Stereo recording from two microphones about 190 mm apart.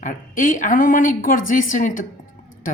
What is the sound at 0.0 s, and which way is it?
Speech, 45° left (ahead or behind).